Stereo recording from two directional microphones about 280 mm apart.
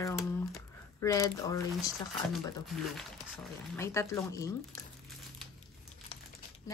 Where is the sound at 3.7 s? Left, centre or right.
Centre.